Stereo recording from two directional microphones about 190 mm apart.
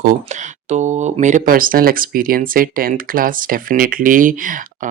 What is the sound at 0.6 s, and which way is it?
Speech, 35° right (ahead or behind).